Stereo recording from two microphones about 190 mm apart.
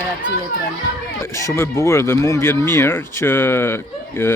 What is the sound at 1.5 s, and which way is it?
Speech, 15° left (ahead or behind).